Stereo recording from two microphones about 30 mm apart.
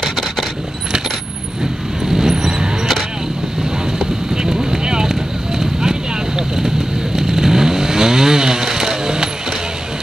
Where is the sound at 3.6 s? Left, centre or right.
Right.